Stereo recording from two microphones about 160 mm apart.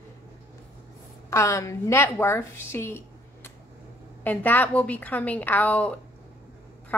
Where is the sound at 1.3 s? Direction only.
20° left (ahead or behind).